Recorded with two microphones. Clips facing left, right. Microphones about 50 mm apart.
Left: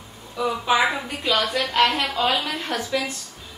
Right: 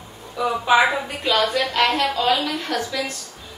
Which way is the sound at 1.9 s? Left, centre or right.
Centre.